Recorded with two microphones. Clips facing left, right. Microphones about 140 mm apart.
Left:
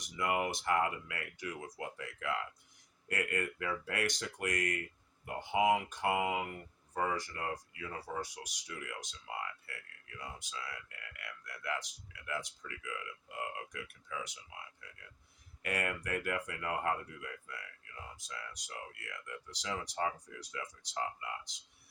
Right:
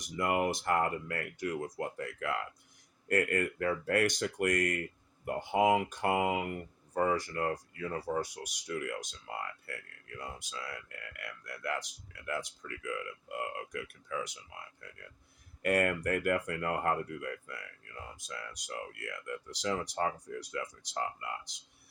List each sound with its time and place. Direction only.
0.2 s speech: 50° right (ahead or behind)